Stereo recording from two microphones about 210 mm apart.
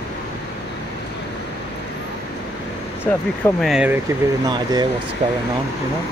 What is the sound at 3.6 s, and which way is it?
Speech, 5° right (ahead or behind).